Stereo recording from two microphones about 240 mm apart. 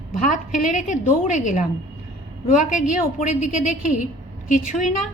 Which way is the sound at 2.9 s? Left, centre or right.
Left.